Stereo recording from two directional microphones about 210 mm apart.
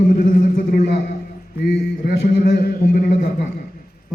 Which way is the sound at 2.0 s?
50° left (ahead or behind).